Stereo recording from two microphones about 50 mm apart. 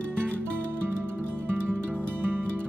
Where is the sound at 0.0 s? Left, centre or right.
Left.